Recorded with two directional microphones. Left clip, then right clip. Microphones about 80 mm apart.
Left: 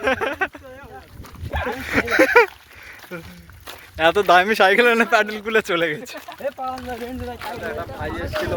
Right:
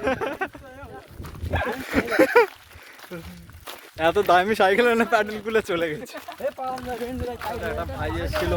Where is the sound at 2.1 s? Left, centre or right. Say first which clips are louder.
Left 3 dB; right.